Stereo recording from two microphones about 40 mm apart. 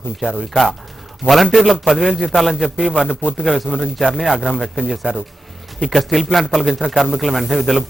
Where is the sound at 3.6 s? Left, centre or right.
Right.